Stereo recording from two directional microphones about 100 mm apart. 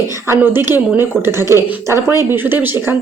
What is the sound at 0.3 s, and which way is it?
Speech, 25° right (ahead or behind).